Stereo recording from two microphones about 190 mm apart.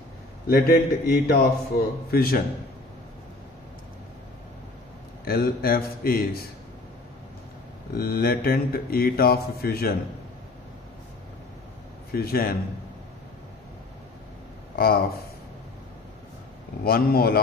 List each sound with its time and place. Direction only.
0.5 s a man's voice: 55° left (ahead or behind)
5.2 s a man's voice: 50° left (ahead or behind)
7.9 s a man's voice: 55° left (ahead or behind)
12.1 s a man's voice: 55° left (ahead or behind)
14.8 s a man's voice: 50° left (ahead or behind)
16.8 s a man's voice: 50° left (ahead or behind)